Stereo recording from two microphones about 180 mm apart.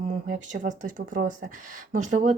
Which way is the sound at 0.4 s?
45° right (ahead or behind).